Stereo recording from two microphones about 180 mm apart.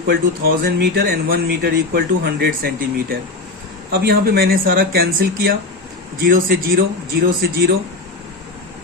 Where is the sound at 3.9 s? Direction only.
60° right (ahead or behind).